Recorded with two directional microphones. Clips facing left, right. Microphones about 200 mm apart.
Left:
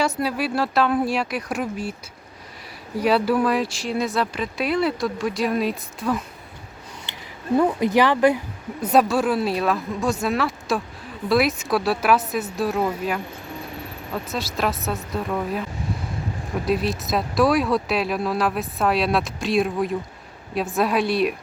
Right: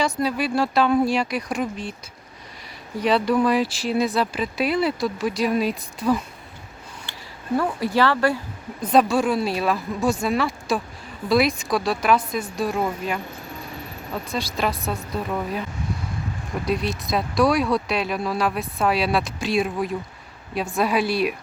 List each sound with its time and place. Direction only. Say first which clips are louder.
0.0 s speech: even; 5° left (ahead or behind)
3.0 s speech: even; 5° left (ahead or behind)
7.0 s speech: left 3 dB; 20° left (ahead or behind)
8.8 s speech: even; 5° left (ahead or behind)
16.6 s speech: left 2 dB; centre (ahead or behind)